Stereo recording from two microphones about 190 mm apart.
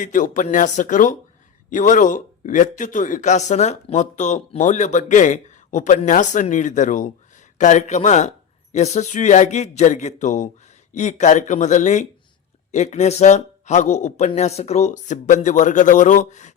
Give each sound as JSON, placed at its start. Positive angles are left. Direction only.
{"t": 0.0, "sound": "a man's voice", "side_deg": 45}